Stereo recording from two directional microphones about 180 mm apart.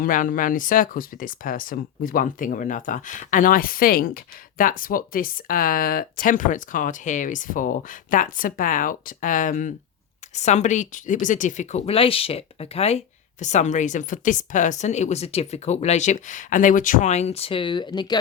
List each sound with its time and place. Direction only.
0.0 s speech: 50° left (ahead or behind); by 18.2 s 25° left (ahead or behind)